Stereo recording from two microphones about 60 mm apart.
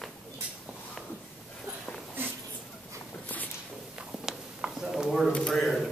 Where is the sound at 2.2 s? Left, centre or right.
Right.